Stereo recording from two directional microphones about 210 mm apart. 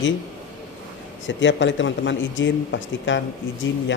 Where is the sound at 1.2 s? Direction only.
60° left (ahead or behind).